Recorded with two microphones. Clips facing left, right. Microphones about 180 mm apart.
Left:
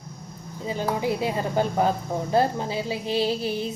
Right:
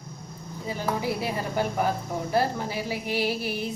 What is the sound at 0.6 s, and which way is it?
Speech, 20° left (ahead or behind).